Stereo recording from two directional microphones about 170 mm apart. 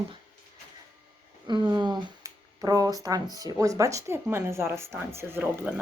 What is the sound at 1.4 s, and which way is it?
A woman's voice, 25° right (ahead or behind).